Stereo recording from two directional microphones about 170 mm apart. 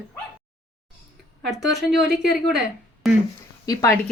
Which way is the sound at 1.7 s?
Centre (ahead or behind).